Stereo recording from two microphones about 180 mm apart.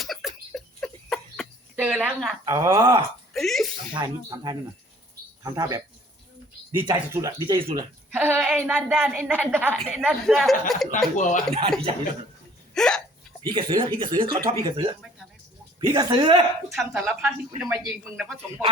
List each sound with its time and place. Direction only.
0.0 s a sound: centre (ahead or behind)
1.7 s a woman's voice: 10° right (ahead or behind)
2.4 s speech: 20° right (ahead or behind)
3.3 s speech: centre (ahead or behind)
3.9 s speech: 20° right (ahead or behind)
6.8 s speech: 20° right (ahead or behind)
8.1 s speech: 10° right (ahead or behind)
11.2 s a man's voice: 45° left (ahead or behind)
12.7 s hiccup: 5° left (ahead or behind)
13.4 s speech: 25° right (ahead or behind)
16.7 s speech: centre (ahead or behind)